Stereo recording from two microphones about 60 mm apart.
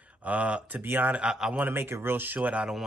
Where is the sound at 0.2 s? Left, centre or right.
Right.